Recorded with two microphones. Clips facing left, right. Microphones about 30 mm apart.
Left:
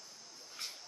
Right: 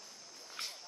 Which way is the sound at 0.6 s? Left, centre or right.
Right.